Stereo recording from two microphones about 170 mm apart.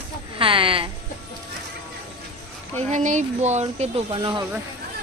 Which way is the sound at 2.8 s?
45° right (ahead or behind).